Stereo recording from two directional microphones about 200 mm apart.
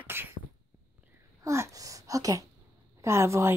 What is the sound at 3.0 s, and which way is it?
Speech, 15° right (ahead or behind).